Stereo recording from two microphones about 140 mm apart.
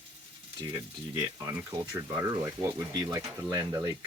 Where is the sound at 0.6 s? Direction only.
25° right (ahead or behind).